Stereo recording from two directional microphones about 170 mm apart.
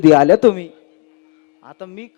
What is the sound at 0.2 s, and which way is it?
A man's voice, 20° left (ahead or behind).